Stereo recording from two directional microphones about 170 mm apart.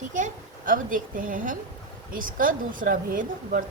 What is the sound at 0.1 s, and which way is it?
A woman's voice, 50° right (ahead or behind).